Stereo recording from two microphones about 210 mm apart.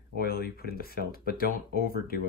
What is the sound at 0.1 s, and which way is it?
Speech, 45° left (ahead or behind).